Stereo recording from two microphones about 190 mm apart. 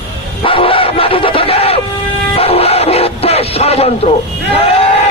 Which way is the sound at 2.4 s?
30° left (ahead or behind).